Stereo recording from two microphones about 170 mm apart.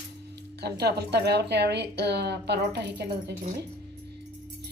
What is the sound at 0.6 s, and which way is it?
Speech, 75° right (ahead or behind).